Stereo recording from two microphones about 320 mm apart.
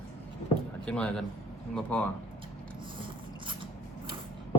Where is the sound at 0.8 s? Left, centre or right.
Centre.